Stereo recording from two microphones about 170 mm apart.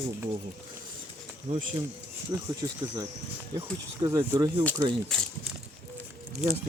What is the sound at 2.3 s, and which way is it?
Speech, 25° right (ahead or behind).